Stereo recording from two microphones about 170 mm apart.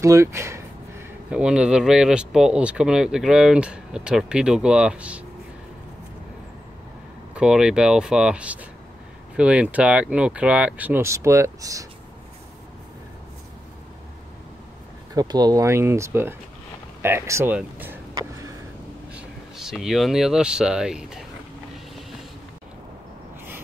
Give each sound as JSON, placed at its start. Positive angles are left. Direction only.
{"t": 0.0, "sound": "speech", "side_deg": -15}
{"t": 7.3, "sound": "speech", "side_deg": -5}
{"t": 15.1, "sound": "speech", "side_deg": -25}
{"t": 18.1, "sound": "a sound", "side_deg": -20}
{"t": 19.1, "sound": "speech", "side_deg": -5}